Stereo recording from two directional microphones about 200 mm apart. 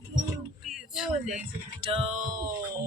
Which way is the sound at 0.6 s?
Centre (ahead or behind).